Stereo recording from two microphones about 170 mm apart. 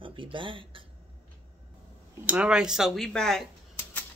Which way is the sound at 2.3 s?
5° right (ahead or behind).